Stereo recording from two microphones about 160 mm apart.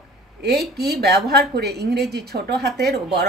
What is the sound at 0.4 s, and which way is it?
A woman's voice, 90° right.